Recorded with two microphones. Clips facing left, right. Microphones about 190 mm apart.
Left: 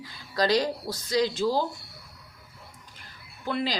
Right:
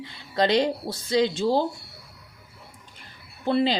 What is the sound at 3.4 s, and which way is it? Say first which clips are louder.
Speech: right 7 dB; 25° right (ahead or behind).